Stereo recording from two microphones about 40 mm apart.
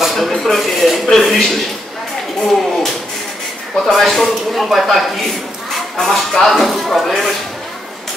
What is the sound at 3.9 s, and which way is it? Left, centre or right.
Speech, centre.